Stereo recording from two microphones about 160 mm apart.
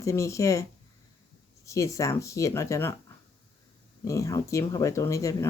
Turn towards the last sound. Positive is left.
turn(degrees=20)  # may be behind; listen again after turning